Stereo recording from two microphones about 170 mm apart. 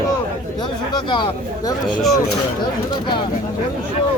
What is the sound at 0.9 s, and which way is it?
Speech, 30° left (ahead or behind).